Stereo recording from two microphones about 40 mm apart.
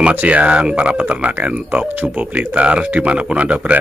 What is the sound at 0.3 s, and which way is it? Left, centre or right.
Speech, right.